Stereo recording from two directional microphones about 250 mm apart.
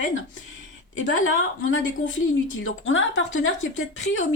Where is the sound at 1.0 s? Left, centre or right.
Left.